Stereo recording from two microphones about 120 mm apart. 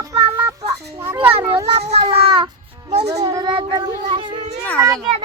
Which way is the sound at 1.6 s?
60° right (ahead or behind).